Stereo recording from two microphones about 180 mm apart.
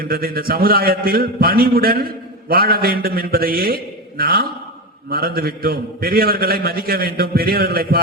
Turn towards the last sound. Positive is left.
turn(degrees=-55)  # may be behind; listen again after turning